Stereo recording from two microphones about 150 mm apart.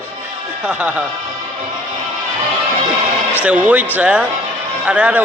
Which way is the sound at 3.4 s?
10° right (ahead or behind).